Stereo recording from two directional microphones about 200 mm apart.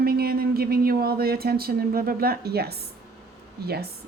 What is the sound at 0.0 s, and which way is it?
Speech, 50° right (ahead or behind).